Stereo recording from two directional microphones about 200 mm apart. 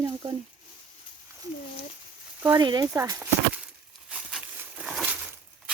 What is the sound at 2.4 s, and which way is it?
Speech, 20° right (ahead or behind).